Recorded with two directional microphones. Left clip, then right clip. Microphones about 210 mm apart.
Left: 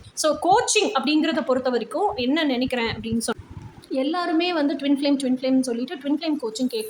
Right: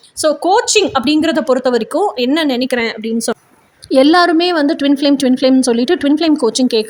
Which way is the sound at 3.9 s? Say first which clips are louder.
Right 15 dB; 50° right (ahead or behind).